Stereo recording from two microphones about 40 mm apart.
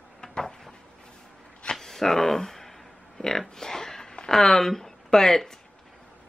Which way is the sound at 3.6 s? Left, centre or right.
Centre.